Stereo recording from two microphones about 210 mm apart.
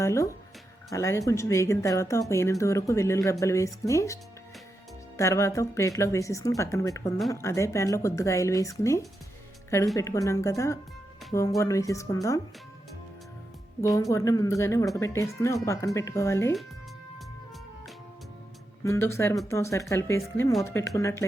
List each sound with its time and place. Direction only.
0.0 s speech: 15° left (ahead or behind)
13.8 s speech: 15° left (ahead or behind)
18.9 s speech: 15° left (ahead or behind)